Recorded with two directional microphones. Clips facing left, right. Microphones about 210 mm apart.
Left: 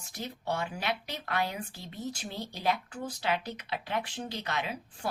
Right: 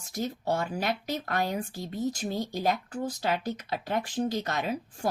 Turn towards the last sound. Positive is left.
turn(degrees=-45)  # may be behind; listen again after turning